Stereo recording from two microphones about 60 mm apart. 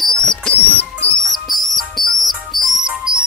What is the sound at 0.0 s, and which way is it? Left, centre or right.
Music, centre.